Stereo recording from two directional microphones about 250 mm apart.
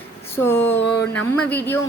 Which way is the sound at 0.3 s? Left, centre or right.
Centre.